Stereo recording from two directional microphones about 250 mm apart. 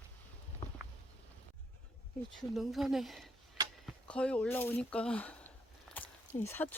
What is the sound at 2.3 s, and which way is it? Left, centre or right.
Speech, centre.